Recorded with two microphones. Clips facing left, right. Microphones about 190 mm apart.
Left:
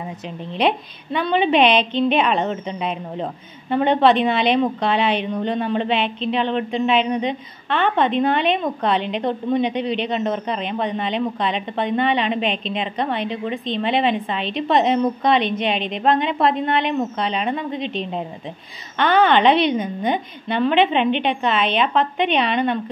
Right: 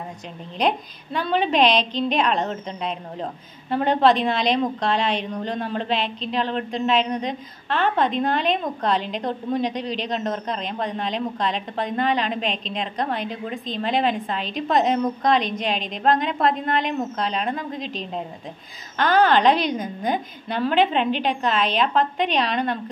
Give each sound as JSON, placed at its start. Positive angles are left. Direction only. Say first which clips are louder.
{"t": 0.6, "sound": "a woman's voice", "louder": "left 2 dB", "side_deg": 0}
{"t": 9.8, "sound": "a man's voice", "louder": "left 5 dB", "side_deg": 65}
{"t": 10.0, "sound": "a woman's voice", "louder": "left 4 dB", "side_deg": 5}